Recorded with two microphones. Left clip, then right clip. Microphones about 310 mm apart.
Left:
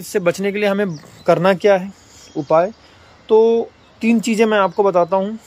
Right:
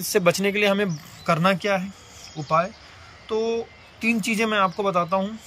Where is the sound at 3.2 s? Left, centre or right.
Centre.